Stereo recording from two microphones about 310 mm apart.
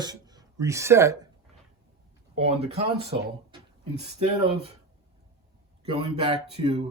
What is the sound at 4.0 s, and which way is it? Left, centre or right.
Speech, right.